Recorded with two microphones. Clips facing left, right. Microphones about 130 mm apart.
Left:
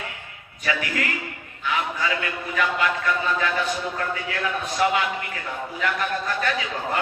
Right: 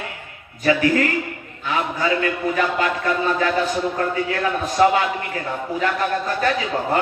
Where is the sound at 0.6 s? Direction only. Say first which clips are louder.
Right 9 dB; 35° right (ahead or behind).